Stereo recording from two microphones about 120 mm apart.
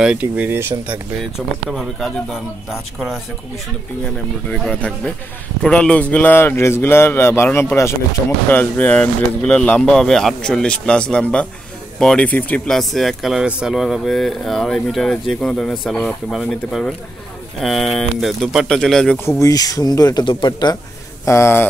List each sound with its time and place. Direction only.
0.0 s speech: 10° right (ahead or behind)
1.7 s speech: centre (ahead or behind)
4.5 s speech: 10° left (ahead or behind)
19.4 s speech: 30° left (ahead or behind)
21.3 s speech: 20° left (ahead or behind)